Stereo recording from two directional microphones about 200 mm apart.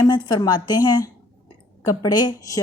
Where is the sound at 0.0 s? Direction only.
20° left (ahead or behind).